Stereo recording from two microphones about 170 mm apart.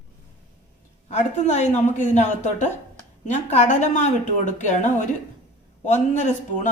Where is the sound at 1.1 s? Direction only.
45° left (ahead or behind).